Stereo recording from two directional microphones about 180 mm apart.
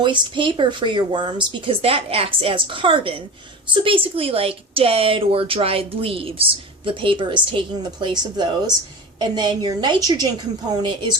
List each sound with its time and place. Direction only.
0.0 s speech: 25° right (ahead or behind)